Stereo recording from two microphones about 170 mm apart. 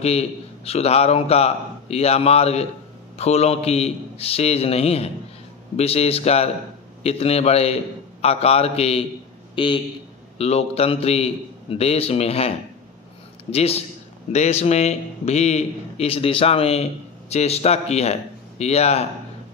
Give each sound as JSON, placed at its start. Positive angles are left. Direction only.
{"t": 0.0, "sound": "a man's voice", "side_deg": 40}